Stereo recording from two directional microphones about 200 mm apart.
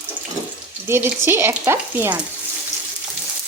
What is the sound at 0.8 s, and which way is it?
Speech, 10° right (ahead or behind).